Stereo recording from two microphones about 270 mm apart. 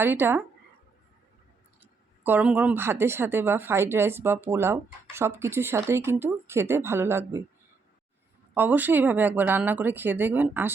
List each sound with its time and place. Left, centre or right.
0.0 s a woman's voice: centre
1.8 s a woman's voice: centre
8.5 s a woman's voice: centre